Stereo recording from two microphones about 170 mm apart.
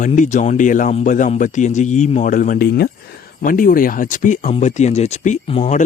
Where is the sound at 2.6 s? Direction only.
70° left (ahead or behind).